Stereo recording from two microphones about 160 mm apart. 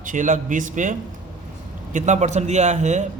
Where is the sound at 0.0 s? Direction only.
55° right (ahead or behind).